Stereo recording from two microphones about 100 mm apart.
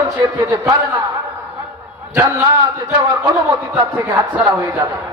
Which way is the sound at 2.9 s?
50° right (ahead or behind).